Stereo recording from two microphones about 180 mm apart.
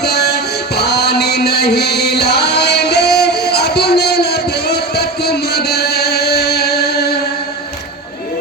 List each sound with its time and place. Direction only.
0.0 s music: 65° left (ahead or behind)